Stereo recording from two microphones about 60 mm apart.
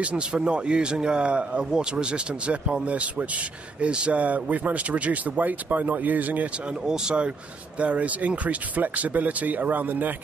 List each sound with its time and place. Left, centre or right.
0.0 s a man's voice: centre
6.9 s a man's voice: centre; by 10.1 s right